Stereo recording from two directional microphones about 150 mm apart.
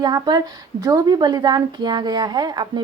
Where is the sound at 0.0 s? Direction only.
25° right (ahead or behind).